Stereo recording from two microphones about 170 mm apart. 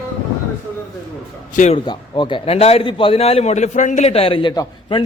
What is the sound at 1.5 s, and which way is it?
Speech, 45° left (ahead or behind).